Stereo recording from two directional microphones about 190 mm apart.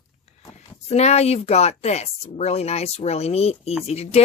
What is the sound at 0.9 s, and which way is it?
Speech, 35° left (ahead or behind).